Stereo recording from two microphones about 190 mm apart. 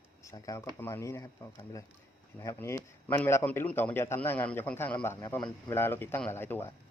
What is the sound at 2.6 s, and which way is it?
Speech, 15° left (ahead or behind).